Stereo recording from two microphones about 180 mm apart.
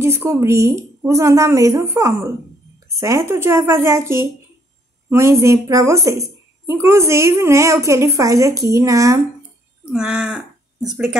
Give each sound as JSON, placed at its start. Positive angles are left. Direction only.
{"t": 0.0, "sound": "a woman's voice", "side_deg": -15}
{"t": 9.8, "sound": "speech", "side_deg": -5}